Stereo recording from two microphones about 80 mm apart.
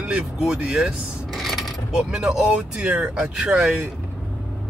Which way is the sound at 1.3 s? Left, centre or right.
Centre.